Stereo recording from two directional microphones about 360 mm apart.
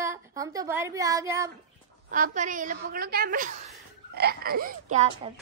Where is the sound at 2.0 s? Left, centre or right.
Right.